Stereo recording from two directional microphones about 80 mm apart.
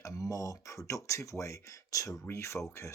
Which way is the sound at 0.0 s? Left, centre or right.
Left.